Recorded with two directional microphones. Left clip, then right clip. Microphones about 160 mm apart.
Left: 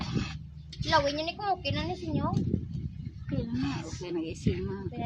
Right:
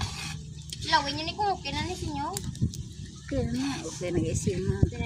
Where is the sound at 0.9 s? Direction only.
50° left (ahead or behind).